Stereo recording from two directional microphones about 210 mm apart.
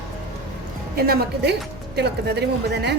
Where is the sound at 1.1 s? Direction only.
50° right (ahead or behind).